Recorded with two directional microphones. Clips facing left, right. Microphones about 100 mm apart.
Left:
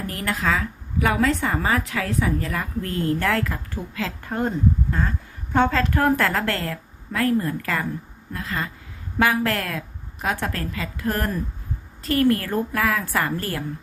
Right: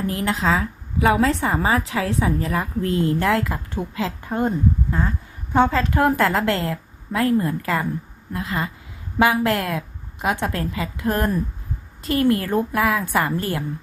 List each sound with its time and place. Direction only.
0.1 s a woman's voice: 20° right (ahead or behind)